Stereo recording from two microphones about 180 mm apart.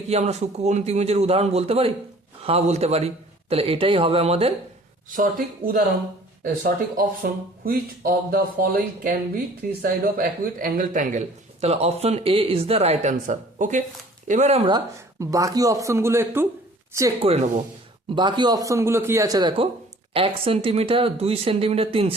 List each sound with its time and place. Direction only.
0.1 s speech: 40° right (ahead or behind)
5.0 s speech: 50° right (ahead or behind)
15.2 s speech: 20° right (ahead or behind)
17.2 s speech: 35° right (ahead or behind)